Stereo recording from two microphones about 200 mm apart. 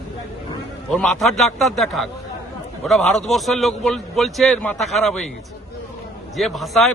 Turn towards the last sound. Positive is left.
turn(degrees=0)  # may be behind; listen again after turning